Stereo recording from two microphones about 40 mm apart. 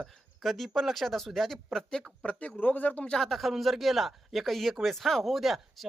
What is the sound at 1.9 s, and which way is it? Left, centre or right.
Speech, centre.